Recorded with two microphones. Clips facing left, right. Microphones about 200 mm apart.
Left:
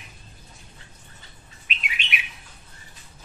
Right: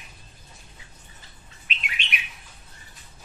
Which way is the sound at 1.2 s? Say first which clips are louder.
Left 1 dB; centre (ahead or behind).